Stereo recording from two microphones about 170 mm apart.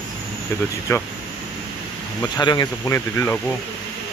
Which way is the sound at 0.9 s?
15° left (ahead or behind).